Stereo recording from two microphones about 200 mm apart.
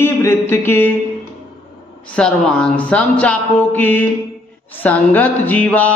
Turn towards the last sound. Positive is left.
turn(degrees=5)  # may be behind; listen again after turning